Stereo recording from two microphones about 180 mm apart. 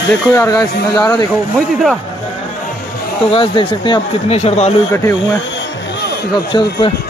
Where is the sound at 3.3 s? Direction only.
30° left (ahead or behind).